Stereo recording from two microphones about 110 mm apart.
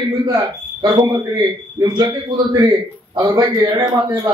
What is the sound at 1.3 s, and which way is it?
Speech, 30° right (ahead or behind).